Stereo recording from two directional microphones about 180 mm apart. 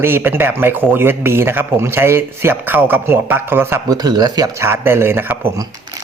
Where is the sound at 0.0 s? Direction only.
10° right (ahead or behind).